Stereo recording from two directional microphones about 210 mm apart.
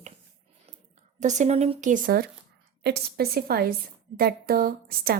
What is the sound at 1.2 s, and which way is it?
A woman's voice, 35° right (ahead or behind).